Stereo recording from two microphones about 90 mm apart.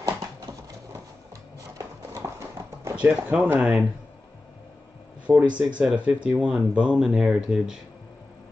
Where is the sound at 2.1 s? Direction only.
35° right (ahead or behind).